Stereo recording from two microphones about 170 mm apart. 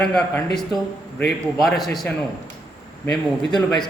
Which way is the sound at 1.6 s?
Centre (ahead or behind).